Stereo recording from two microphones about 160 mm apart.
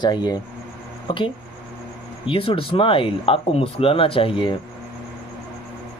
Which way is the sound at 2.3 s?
35° left (ahead or behind).